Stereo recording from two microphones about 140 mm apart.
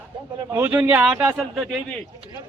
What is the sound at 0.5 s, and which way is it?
Speech, 15° right (ahead or behind).